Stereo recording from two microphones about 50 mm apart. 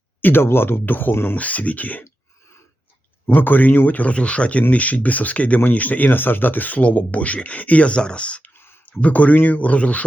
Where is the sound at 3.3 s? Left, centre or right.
Left.